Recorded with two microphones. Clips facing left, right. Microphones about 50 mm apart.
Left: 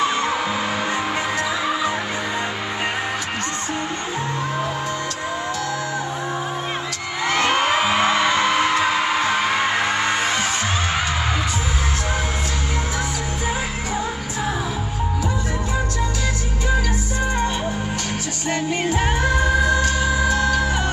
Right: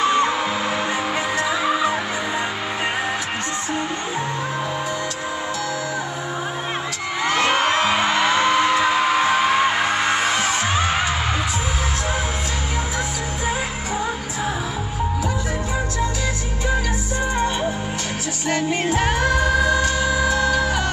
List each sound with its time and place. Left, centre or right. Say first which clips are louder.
0.0 s music: right 2 dB; centre
7.2 s crowd: even; centre
7.6 s music: even; centre
18.7 s music: right 1 dB; centre
19.1 s music: right 1 dB; left
19.7 s music: even; centre